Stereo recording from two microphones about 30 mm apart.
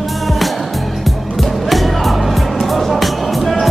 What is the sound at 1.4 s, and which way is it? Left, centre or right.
Music, centre.